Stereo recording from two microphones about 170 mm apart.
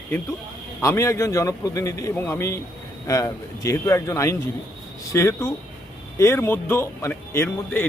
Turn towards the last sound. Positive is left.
turn(degrees=15)  # may be behind; listen again after turning